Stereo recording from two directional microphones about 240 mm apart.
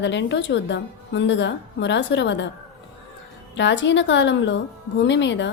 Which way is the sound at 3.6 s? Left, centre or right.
Left.